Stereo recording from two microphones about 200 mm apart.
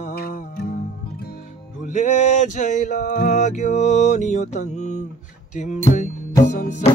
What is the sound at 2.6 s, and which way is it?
Music, 40° left (ahead or behind).